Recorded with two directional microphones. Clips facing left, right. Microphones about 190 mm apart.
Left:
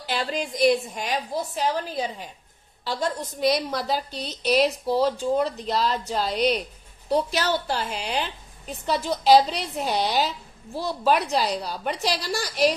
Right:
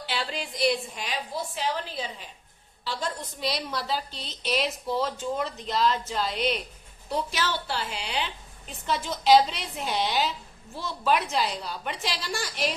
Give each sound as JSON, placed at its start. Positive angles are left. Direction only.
{"t": 0.0, "sound": "a woman's voice", "side_deg": 45}